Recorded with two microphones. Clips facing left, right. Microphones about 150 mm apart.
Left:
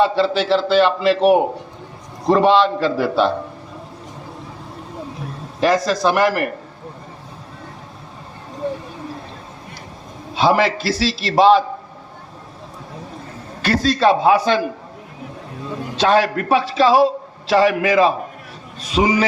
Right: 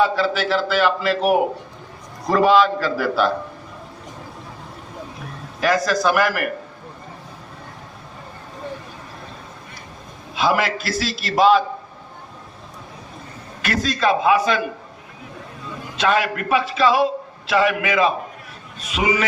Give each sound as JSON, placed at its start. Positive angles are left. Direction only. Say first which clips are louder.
{"t": 0.0, "sound": "a man's voice", "louder": "left 3 dB", "side_deg": 30}
{"t": 5.5, "sound": "a man's voice", "louder": "left 2 dB", "side_deg": 30}
{"t": 10.3, "sound": "a man's voice", "louder": "left 4 dB", "side_deg": 30}
{"t": 13.6, "sound": "a man's voice", "louder": "left 5 dB", "side_deg": 30}
{"t": 16.0, "sound": "a man's voice", "louder": "left 4 dB", "side_deg": 35}